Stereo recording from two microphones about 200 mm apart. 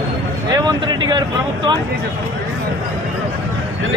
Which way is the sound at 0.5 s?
20° right (ahead or behind).